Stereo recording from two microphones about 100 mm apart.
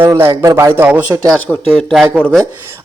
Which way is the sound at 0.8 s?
15° right (ahead or behind).